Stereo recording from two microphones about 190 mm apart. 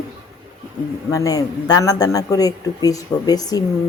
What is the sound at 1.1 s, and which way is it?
A man's voice, 20° left (ahead or behind).